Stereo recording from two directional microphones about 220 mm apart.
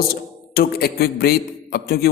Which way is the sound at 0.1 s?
45° left (ahead or behind).